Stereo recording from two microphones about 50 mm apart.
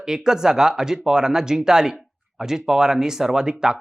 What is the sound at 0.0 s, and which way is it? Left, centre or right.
Speech, centre.